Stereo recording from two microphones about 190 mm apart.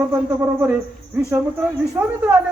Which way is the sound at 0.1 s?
10° right (ahead or behind).